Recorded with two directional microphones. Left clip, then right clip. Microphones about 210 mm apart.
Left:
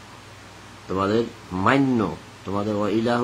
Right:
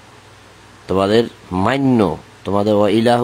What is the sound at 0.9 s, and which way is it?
Speech, 45° right (ahead or behind).